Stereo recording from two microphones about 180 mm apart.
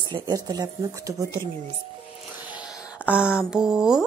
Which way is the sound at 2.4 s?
10° right (ahead or behind).